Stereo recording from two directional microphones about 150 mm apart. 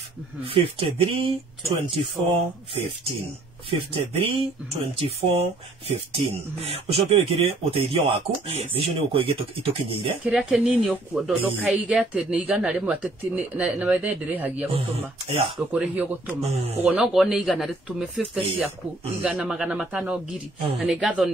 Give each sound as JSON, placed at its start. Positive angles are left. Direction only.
{"t": 0.5, "sound": "speech", "side_deg": -40}
{"t": 3.9, "sound": "speech", "side_deg": -40}
{"t": 10.2, "sound": "speech", "side_deg": -5}
{"t": 15.2, "sound": "speech", "side_deg": -40}
{"t": 15.7, "sound": "speech", "side_deg": -10}
{"t": 16.3, "sound": "speech", "side_deg": -45}
{"t": 16.8, "sound": "speech", "side_deg": -5}